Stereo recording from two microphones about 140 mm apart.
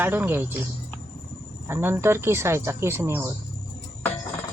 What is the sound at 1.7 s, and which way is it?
Speech, 15° right (ahead or behind).